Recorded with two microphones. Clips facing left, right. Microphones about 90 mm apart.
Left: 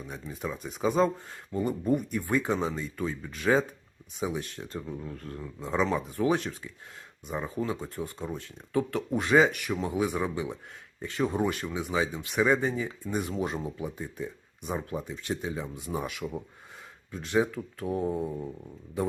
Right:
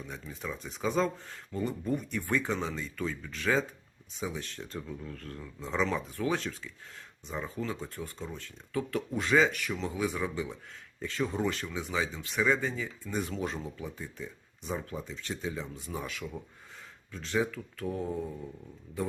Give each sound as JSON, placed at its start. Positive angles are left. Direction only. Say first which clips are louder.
{"t": 0.0, "sound": "speech", "louder": "left 4 dB", "side_deg": 10}
{"t": 3.1, "sound": "speech", "louder": "left 5 dB", "side_deg": 25}
{"t": 5.5, "sound": "speech", "louder": "left 3 dB", "side_deg": 5}
{"t": 6.1, "sound": "speech", "louder": "left 5 dB", "side_deg": 20}